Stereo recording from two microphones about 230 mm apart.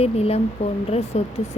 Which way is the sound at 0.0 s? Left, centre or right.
Left.